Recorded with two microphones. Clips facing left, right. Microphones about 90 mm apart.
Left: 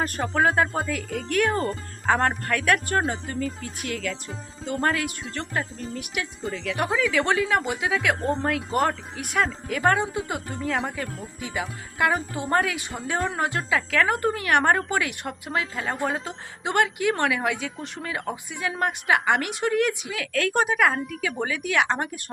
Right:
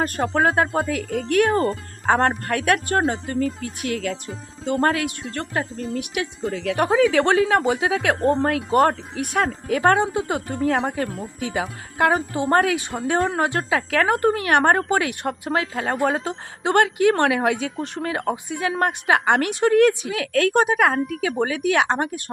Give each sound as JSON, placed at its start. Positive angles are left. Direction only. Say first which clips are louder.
{"t": 0.0, "sound": "a woman's voice", "louder": "right 3 dB", "side_deg": -40}
{"t": 0.9, "sound": "speech", "louder": "right 5 dB", "side_deg": -55}
{"t": 1.4, "sound": "a woman's voice", "louder": "right 5 dB", "side_deg": -45}
{"t": 2.9, "sound": "a woman's voice", "louder": "right 4 dB", "side_deg": -50}
{"t": 8.1, "sound": "speech", "louder": "right 6 dB", "side_deg": -50}
{"t": 8.4, "sound": "a woman's voice", "louder": "right 4 dB", "side_deg": -40}
{"t": 10.5, "sound": "a woman's voice", "louder": "right 6 dB", "side_deg": -50}
{"t": 20.7, "sound": "a woman's voice", "louder": "right 3 dB", "side_deg": -35}